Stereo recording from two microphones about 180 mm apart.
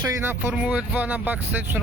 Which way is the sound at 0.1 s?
15° right (ahead or behind).